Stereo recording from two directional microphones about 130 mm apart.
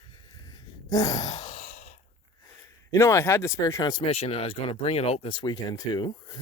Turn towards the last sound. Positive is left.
turn(degrees=35)  # may be behind; listen again after turning